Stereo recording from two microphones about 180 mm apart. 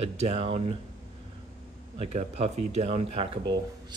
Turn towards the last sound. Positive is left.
turn(degrees=-35)  # may be behind; listen again after turning